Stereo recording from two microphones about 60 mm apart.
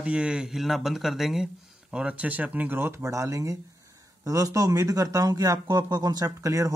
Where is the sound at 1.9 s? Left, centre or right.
Centre; by 3.0 s right.